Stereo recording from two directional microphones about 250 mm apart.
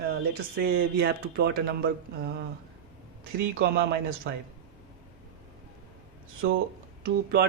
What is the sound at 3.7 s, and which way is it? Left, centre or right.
Speech, right.